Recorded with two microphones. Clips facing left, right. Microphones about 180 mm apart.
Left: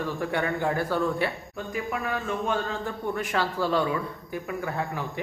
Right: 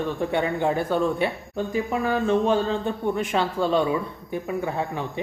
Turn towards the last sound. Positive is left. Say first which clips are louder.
# right 3 dB
turn(degrees=-20)  # may be behind; listen again after turning